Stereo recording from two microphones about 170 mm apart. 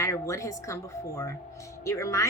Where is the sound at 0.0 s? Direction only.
20° left (ahead or behind).